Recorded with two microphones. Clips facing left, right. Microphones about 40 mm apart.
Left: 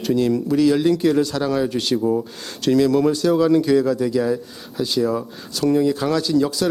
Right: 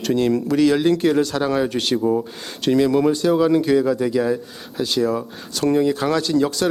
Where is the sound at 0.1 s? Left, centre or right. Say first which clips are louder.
Even; centre.